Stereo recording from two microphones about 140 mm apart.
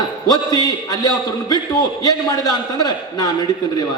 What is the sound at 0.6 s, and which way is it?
A man's voice, 30° left (ahead or behind).